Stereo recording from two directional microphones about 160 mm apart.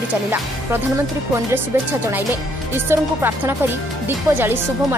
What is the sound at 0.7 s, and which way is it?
Speech, 15° right (ahead or behind).